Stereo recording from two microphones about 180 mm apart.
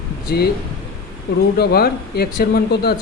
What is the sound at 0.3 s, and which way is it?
Speech, 60° left (ahead or behind).